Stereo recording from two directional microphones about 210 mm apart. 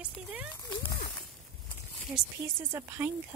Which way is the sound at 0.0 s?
5° right (ahead or behind).